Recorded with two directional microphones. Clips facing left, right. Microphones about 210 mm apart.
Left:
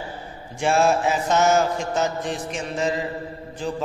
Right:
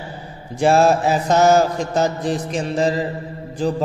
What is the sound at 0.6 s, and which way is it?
A man's voice, 35° right (ahead or behind).